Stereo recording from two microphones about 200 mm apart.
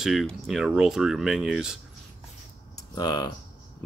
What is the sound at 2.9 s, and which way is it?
Speech, 20° left (ahead or behind).